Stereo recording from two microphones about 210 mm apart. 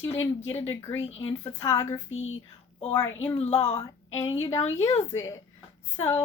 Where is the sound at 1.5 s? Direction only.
15° left (ahead or behind).